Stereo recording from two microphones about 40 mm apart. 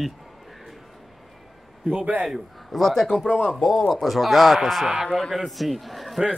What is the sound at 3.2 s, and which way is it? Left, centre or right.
Speech, centre.